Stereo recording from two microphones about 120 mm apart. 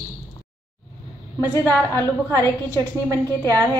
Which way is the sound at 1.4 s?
20° left (ahead or behind).